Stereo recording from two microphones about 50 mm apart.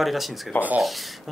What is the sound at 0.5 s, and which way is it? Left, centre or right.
Speech, left.